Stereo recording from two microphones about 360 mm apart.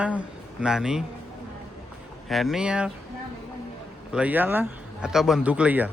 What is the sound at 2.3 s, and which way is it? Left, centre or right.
Speech, centre.